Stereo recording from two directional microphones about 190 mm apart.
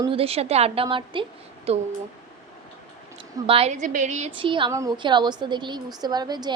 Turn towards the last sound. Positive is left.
turn(degrees=-20)  # may be behind; listen again after turning